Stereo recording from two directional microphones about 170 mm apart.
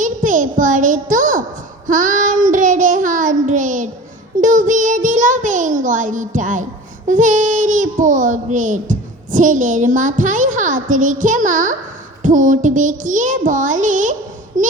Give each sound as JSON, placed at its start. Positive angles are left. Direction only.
{"t": 0.0, "sound": "a sound", "side_deg": -50}
{"t": 1.9, "sound": "child singing", "side_deg": -50}
{"t": 7.1, "sound": "speech", "side_deg": -50}